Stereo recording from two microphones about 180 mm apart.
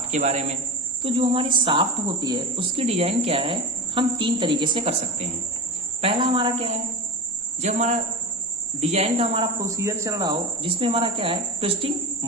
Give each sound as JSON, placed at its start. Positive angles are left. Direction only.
{"t": 0.1, "sound": "speech", "side_deg": -40}
{"t": 1.0, "sound": "a woman's voice", "side_deg": -30}